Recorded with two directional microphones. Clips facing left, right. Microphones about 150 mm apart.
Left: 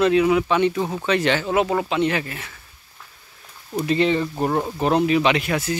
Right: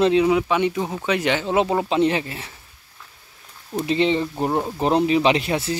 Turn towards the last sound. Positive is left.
turn(degrees=-30)  # may be behind; listen again after turning